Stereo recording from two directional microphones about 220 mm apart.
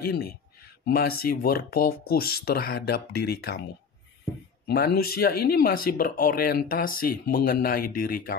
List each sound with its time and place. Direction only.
0.0 s speech: 45° left (ahead or behind)
4.6 s speech: 45° left (ahead or behind)